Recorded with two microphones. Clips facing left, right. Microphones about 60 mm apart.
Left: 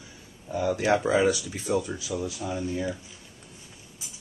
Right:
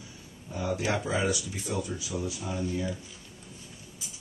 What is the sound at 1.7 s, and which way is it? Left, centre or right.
Speech, left.